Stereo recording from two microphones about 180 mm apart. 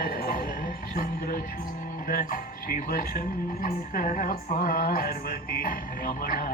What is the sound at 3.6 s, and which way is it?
A woman's voice, 50° left (ahead or behind).